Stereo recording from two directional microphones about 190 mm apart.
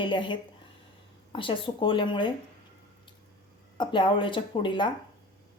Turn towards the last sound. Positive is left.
turn(degrees=25)  # may be behind; listen again after turning